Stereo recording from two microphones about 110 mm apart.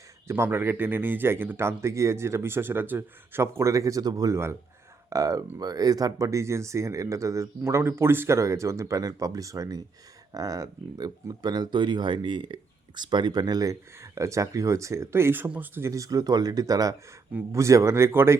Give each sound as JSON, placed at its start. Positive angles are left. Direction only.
{"t": 0.3, "sound": "speech", "side_deg": -25}
{"t": 15.9, "sound": "speech", "side_deg": -30}